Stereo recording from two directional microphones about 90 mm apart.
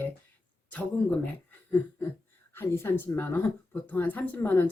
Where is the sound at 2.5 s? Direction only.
30° left (ahead or behind).